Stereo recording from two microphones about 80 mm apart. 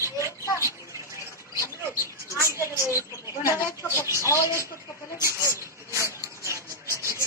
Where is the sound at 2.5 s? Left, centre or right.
Left.